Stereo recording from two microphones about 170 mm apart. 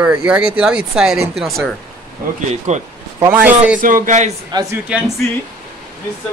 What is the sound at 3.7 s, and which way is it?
Speech, 50° right (ahead or behind).